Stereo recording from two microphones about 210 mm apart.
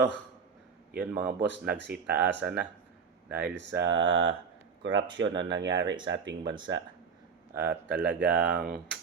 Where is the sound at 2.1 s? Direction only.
55° right (ahead or behind).